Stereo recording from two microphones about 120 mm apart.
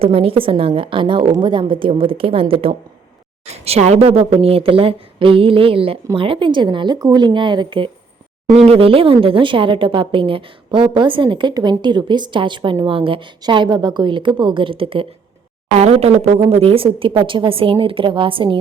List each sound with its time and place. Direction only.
0.0 s speech: 50° right (ahead or behind)
3.4 s a woman's voice: 60° right (ahead or behind); by 7.9 s 40° right (ahead or behind)
8.5 s speech: 55° right (ahead or behind)
15.8 s speech: 60° right (ahead or behind)